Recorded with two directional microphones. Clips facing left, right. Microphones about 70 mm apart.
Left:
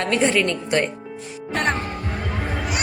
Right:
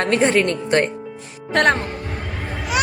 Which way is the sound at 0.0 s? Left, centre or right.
Right.